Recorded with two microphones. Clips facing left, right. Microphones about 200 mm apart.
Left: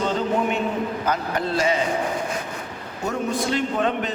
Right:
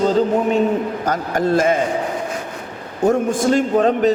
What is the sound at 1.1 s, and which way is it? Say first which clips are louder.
Speech: right 9 dB; 45° right (ahead or behind).